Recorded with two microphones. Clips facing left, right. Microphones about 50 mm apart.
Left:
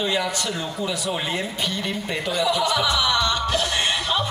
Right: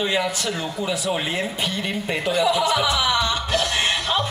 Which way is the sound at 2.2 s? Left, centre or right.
Centre.